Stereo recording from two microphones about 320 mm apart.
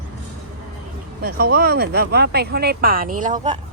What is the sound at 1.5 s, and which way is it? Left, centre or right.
Speech, right.